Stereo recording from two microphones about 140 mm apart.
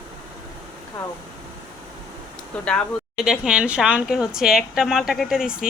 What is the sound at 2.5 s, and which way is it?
Speech, 10° left (ahead or behind).